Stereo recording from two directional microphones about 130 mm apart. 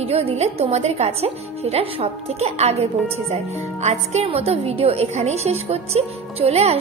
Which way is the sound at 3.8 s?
55° right (ahead or behind).